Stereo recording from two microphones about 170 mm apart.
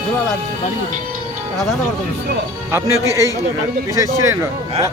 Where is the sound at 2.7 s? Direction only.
20° right (ahead or behind).